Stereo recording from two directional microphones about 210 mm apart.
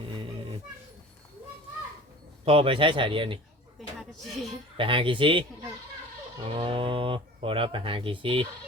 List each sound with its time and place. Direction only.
0.0 s a sound: 25° right (ahead or behind)
2.4 s speech: 25° right (ahead or behind)
4.1 s speech: centre (ahead or behind)
4.8 s speech: 25° right (ahead or behind)
6.5 s speech: 25° right (ahead or behind)